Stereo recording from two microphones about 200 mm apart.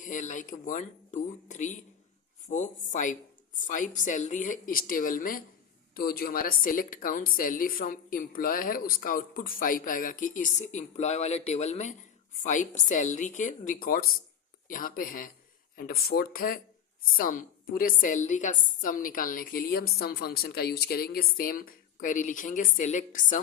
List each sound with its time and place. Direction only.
0.0 s a woman's voice: 40° left (ahead or behind)